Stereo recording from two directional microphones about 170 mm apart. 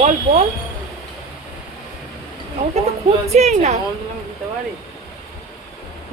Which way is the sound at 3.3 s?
40° right (ahead or behind).